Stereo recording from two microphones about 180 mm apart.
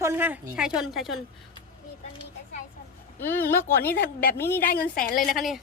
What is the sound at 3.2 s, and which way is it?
Speech, 10° left (ahead or behind).